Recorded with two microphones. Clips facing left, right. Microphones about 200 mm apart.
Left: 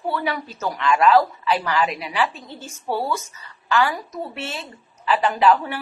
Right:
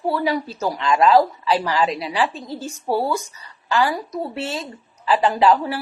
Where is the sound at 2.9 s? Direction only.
15° right (ahead or behind).